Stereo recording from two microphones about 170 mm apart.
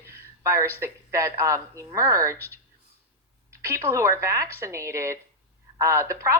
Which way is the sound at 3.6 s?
15° right (ahead or behind).